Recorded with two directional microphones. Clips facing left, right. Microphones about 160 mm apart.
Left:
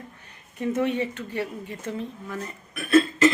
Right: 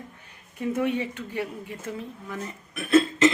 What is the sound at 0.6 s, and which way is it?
Speech, 10° right (ahead or behind).